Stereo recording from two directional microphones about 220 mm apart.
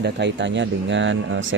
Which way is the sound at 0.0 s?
50° right (ahead or behind).